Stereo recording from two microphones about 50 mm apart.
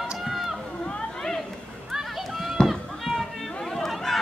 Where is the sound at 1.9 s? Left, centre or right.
Centre.